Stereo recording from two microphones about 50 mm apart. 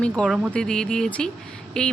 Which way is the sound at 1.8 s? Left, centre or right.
Centre.